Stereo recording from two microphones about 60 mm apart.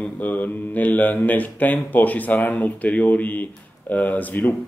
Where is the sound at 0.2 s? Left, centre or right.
Left.